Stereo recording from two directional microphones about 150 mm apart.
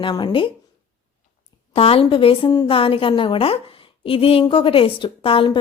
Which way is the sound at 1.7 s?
40° left (ahead or behind).